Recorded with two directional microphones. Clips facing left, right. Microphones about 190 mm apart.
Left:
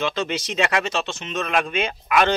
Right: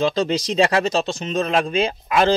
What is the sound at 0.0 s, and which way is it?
A man's voice, 35° right (ahead or behind).